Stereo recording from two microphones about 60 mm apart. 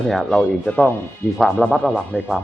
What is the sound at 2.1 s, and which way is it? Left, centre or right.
Speech, left.